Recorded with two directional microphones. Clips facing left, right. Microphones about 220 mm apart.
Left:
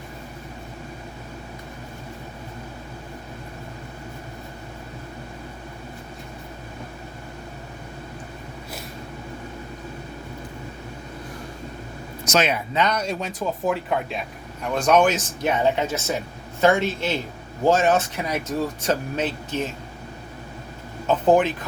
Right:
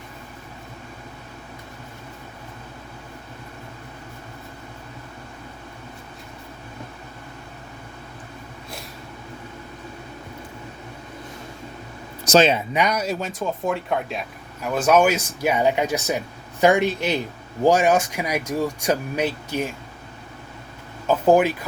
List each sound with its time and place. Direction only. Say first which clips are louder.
12.2 s speech: right 5 dB; 30° right (ahead or behind)
12.7 s speech: right 1 dB; 10° right (ahead or behind)
21.1 s speech: right 1 dB; 10° right (ahead or behind)